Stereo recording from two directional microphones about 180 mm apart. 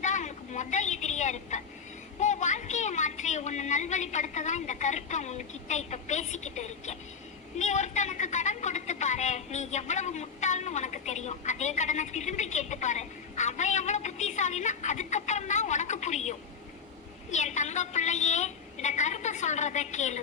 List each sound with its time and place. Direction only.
0.0 s vehicle: 40° left (ahead or behind)
2.2 s a woman's voice: 40° left (ahead or behind)
17.3 s a woman's voice: 40° left (ahead or behind)